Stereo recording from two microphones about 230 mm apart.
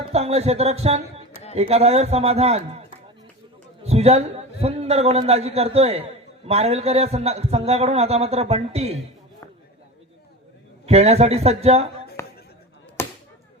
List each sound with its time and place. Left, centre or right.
0.1 s a man's voice: right
3.8 s a man's voice: right
10.8 s a man's voice: right
12.2 s a sound: centre
13.0 s chop: centre